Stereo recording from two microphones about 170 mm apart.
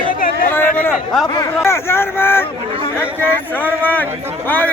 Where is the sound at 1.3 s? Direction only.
20° left (ahead or behind).